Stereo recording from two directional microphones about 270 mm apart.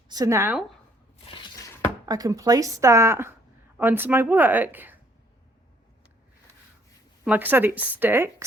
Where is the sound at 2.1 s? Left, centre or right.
Centre.